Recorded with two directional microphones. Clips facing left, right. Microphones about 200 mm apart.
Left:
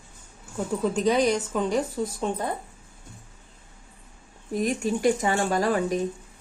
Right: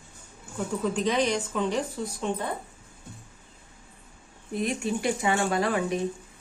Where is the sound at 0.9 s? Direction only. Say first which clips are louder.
Left 4 dB; 40° left (ahead or behind).